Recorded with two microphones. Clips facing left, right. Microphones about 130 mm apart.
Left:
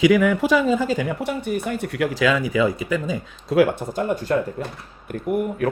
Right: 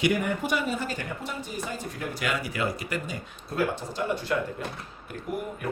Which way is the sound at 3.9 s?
40° left (ahead or behind).